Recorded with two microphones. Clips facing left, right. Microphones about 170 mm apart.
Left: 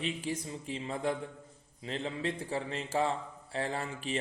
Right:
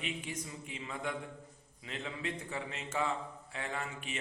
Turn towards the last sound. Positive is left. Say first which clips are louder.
# left 5 dB
turn(degrees=35)  # may be behind; listen again after turning